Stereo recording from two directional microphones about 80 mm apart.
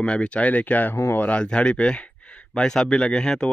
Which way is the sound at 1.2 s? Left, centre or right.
Centre.